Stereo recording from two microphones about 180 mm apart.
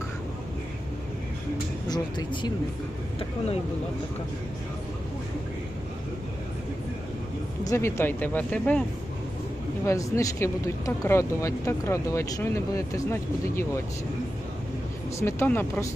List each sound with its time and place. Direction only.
1.9 s speech: 25° left (ahead or behind)
7.6 s speech: 15° left (ahead or behind)
9.8 s speech: 15° left (ahead or behind)
15.2 s speech: 15° left (ahead or behind)